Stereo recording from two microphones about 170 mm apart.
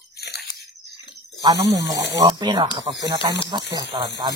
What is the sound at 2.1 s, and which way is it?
Speech, 25° right (ahead or behind).